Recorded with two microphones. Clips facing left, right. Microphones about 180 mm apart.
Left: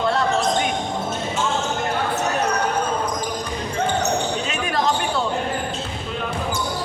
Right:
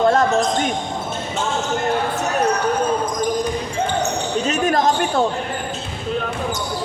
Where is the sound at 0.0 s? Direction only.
45° right (ahead or behind).